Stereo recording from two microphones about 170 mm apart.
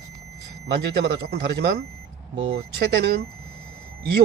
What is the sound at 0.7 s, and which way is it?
A man's voice, 70° right (ahead or behind).